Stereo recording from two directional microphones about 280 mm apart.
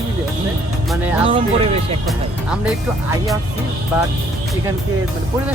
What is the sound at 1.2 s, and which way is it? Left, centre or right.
Speech, centre.